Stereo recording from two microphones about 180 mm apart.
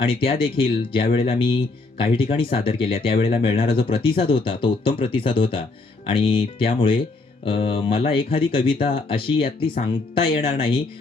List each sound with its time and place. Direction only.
0.0 s speech: 30° left (ahead or behind)